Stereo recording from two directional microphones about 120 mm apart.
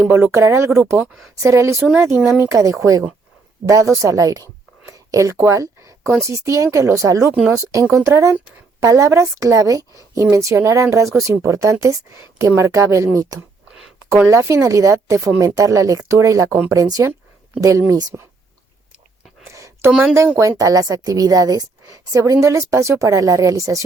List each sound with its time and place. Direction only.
0.0 s a woman's voice: 15° right (ahead or behind)
0.9 s speech: 5° right (ahead or behind)
1.4 s a woman's voice: 25° right (ahead or behind)
4.9 s a sound: 25° right (ahead or behind)
6.2 s a woman's voice: 25° right (ahead or behind)
13.7 s a sound: 5° right (ahead or behind)
14.3 s a woman's voice: 25° right (ahead or behind)
19.5 s a sound: 25° right (ahead or behind)
20.1 s speech: 20° right (ahead or behind)
20.6 s a woman's voice: 30° right (ahead or behind)